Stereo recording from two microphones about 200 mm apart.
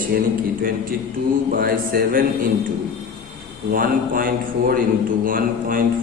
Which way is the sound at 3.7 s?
45° right (ahead or behind).